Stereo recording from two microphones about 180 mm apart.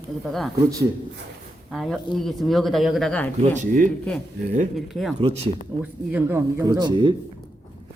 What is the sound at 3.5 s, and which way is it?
Speech, 45° right (ahead or behind).